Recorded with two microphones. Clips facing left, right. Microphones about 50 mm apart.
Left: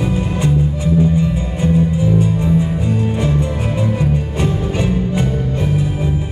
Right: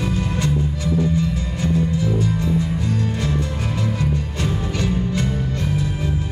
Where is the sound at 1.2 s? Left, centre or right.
Left.